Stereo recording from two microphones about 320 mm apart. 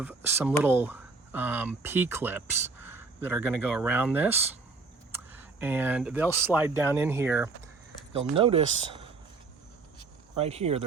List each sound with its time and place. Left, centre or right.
0.0 s speech: centre
10.3 s speech: centre